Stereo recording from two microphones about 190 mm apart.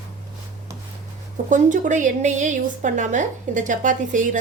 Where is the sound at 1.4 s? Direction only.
45° right (ahead or behind).